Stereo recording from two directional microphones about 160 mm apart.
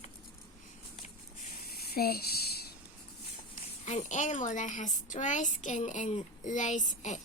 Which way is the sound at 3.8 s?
50° left (ahead or behind).